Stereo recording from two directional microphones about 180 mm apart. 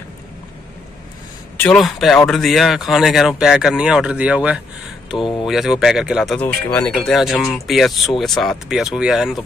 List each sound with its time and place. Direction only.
1.6 s speech: centre (ahead or behind)
5.1 s speech: 25° left (ahead or behind)
5.5 s speech: centre (ahead or behind)